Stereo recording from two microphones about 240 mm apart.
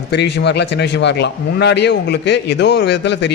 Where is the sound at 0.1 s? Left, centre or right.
Left.